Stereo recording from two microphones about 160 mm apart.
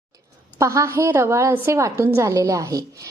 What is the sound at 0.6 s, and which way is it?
A woman's voice, 20° right (ahead or behind).